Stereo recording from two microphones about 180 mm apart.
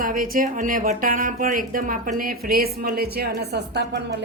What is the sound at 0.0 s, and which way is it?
A woman's voice, 50° right (ahead or behind).